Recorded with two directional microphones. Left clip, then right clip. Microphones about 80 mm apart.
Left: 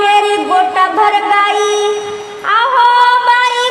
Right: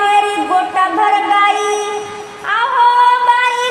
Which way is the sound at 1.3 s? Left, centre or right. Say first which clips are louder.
Left 1 dB; left.